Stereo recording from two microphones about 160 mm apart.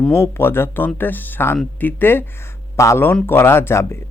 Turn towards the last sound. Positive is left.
turn(degrees=15)  # may be behind; listen again after turning